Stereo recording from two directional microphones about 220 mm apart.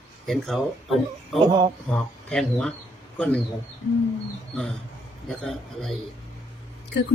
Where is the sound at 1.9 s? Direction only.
5° left (ahead or behind).